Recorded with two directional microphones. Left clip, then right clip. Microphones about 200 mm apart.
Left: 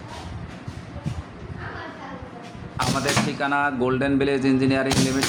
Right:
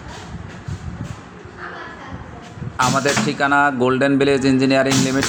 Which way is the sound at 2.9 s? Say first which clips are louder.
Right 5 dB; 20° right (ahead or behind).